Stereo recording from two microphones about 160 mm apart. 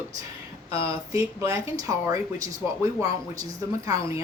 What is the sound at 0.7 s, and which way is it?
Speech, 20° right (ahead or behind).